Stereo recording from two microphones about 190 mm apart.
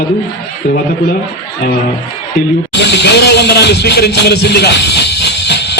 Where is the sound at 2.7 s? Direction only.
65° left (ahead or behind).